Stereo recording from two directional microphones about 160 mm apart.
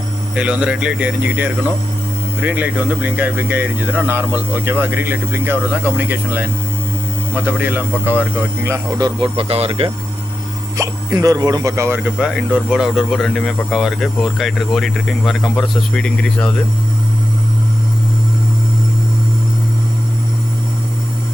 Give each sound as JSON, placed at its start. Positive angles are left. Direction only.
{"t": 0.3, "sound": "speech", "side_deg": -5}
{"t": 9.3, "sound": "speech", "side_deg": -35}
{"t": 10.8, "sound": "speech", "side_deg": -20}